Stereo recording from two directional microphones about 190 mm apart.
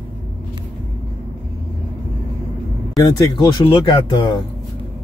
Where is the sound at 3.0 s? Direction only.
20° left (ahead or behind).